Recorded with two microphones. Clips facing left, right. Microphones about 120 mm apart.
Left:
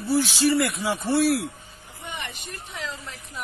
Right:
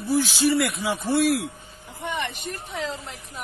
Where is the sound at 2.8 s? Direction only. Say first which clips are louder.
Right 4 dB; 30° right (ahead or behind).